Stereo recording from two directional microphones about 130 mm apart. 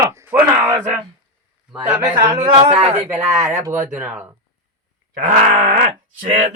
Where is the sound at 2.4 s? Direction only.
45° right (ahead or behind).